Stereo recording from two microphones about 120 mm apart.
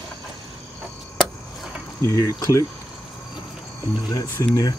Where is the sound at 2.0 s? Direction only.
30° left (ahead or behind).